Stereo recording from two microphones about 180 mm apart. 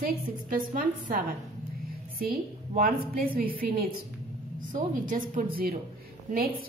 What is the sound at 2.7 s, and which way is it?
Speech, 50° right (ahead or behind).